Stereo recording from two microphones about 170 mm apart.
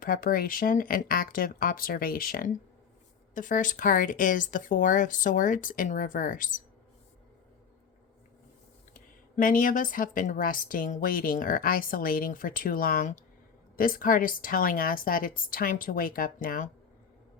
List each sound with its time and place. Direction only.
0.0 s a woman's voice: 55° left (ahead or behind)
8.9 s a woman's voice: 55° left (ahead or behind)